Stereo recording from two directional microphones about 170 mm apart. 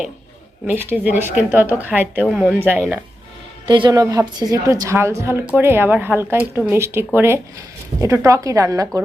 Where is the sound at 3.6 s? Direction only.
30° right (ahead or behind).